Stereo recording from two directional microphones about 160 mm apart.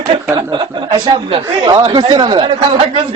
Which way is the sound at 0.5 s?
30° right (ahead or behind).